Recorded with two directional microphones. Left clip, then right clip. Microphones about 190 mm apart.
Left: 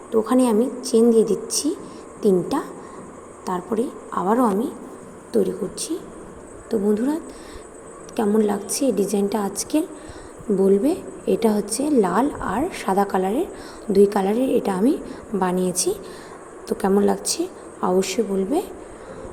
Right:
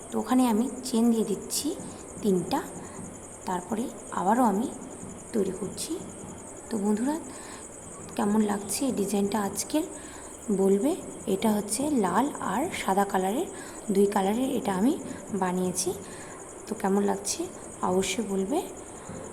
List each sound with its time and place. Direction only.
0.1 s a woman's voice: 15° left (ahead or behind)
3.8 s a woman's voice: 20° left (ahead or behind)